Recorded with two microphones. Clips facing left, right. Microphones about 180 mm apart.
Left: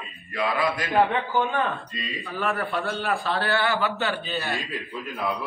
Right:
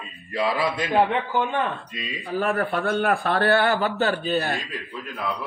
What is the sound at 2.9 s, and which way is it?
Speech, 60° right (ahead or behind).